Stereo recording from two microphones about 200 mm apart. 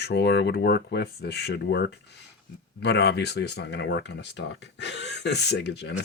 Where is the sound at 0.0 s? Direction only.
55° left (ahead or behind).